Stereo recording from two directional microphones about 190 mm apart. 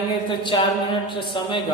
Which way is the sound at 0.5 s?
25° left (ahead or behind).